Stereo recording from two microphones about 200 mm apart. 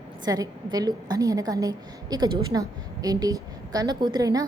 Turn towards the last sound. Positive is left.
turn(degrees=-20)  # may be behind; listen again after turning